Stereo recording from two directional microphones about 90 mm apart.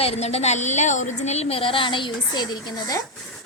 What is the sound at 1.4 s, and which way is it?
A woman's voice, 85° left.